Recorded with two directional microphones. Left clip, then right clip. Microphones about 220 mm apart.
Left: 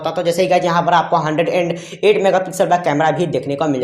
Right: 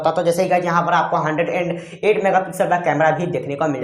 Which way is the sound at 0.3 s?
40° left (ahead or behind).